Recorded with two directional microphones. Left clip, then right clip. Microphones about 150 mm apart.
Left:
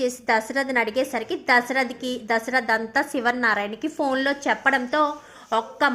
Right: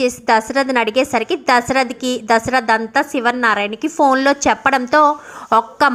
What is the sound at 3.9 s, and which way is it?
A woman's voice, 30° right (ahead or behind).